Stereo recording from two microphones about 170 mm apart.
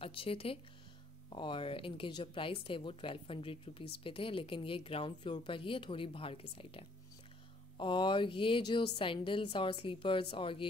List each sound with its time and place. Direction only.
0.0 s a woman's voice: 35° left (ahead or behind)